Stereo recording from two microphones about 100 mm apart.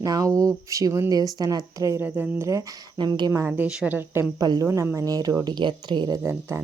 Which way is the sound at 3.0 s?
45° right (ahead or behind).